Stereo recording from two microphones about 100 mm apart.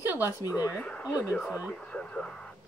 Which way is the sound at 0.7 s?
15° left (ahead or behind).